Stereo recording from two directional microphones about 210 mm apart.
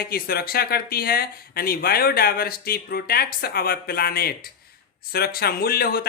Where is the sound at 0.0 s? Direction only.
45° left (ahead or behind).